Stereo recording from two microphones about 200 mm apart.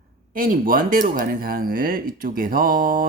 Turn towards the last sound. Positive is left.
turn(degrees=-45)  # may be behind; listen again after turning